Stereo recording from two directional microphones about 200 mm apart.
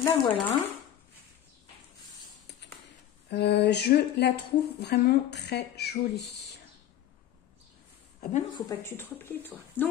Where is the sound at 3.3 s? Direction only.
55° left (ahead or behind).